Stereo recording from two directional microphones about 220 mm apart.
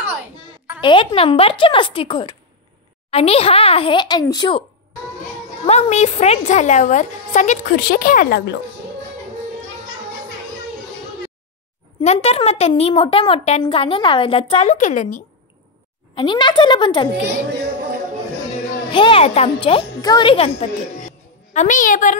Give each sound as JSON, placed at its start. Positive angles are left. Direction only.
{"t": 0.7, "sound": "a woman's voice", "side_deg": 20}
{"t": 5.7, "sound": "a woman's voice", "side_deg": 30}
{"t": 12.0, "sound": "a woman's voice", "side_deg": 30}
{"t": 16.2, "sound": "a woman's voice", "side_deg": 20}
{"t": 18.9, "sound": "a woman's voice", "side_deg": 25}
{"t": 21.5, "sound": "a woman's voice", "side_deg": 35}